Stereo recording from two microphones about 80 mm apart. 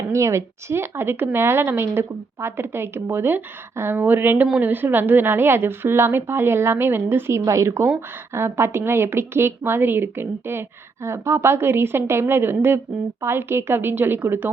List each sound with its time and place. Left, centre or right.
0.1 s a woman's voice: right